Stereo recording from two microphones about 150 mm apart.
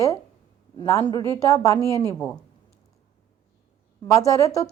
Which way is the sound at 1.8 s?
25° right (ahead or behind).